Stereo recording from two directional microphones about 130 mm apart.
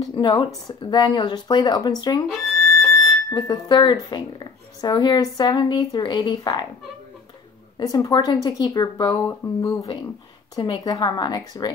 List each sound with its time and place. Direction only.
0.1 s speech: 40° left (ahead or behind)
2.3 s music: centre (ahead or behind)
3.3 s speech: 30° left (ahead or behind)
7.7 s speech: 30° left (ahead or behind)